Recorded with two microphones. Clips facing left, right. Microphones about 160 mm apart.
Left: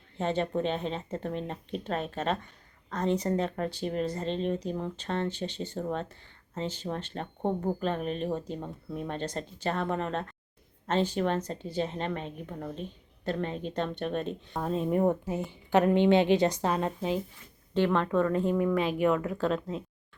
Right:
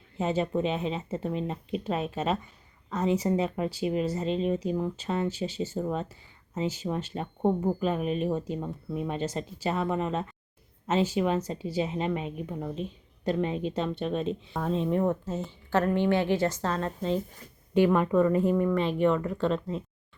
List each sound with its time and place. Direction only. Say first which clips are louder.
0.2 s a woman's voice: right 2 dB; 5° right (ahead or behind); by 17.2 s 10° left (ahead or behind)
17.7 s speech: right 3 dB; 10° right (ahead or behind)